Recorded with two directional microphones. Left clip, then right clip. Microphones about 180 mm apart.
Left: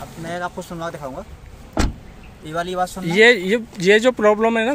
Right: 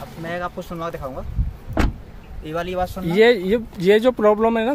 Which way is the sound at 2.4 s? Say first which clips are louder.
Left 1 dB; 25° right (ahead or behind).